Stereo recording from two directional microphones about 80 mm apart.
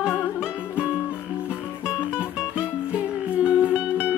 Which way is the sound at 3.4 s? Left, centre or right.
Centre.